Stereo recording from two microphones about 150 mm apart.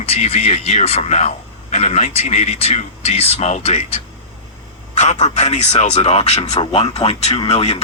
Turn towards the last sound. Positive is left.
turn(degrees=45)  # may be behind; listen again after turning